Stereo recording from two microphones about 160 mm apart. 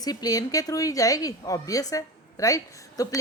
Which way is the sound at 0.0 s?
25° left (ahead or behind).